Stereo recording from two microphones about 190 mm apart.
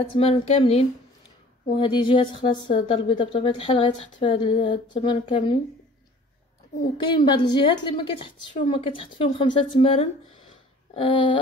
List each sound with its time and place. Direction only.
0.0 s a woman's voice: 30° left (ahead or behind)
7.1 s a woman's voice: 25° left (ahead or behind)